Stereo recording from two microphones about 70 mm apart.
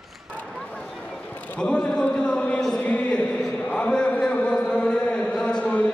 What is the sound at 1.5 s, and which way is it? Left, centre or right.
A man's voice, centre.